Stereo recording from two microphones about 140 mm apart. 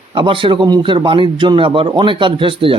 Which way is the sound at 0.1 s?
35° right (ahead or behind).